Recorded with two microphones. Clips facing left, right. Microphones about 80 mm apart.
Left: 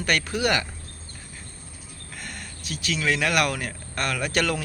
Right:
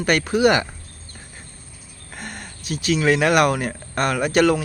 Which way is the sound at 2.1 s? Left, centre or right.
Right.